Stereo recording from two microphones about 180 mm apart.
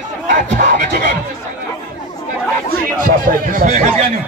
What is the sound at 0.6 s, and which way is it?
Speech, 50° right (ahead or behind).